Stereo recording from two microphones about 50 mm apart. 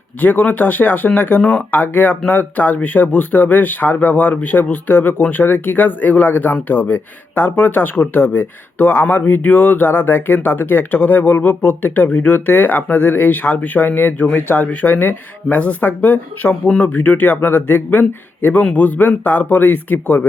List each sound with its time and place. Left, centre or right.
0.2 s speech: left
1.4 s speech: centre
1.7 s speech: left
18.7 s speech: left